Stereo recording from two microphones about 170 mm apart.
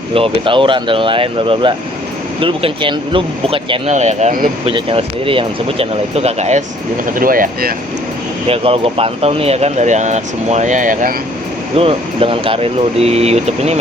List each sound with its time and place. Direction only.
0.4 s speech: 30° right (ahead or behind); by 4.5 s 55° right (ahead or behind)
4.6 s speech: 35° right (ahead or behind); by 7.7 s 55° right (ahead or behind)
8.4 s speech: 35° right (ahead or behind); by 11.1 s 50° right (ahead or behind)
11.8 s speech: 35° right (ahead or behind)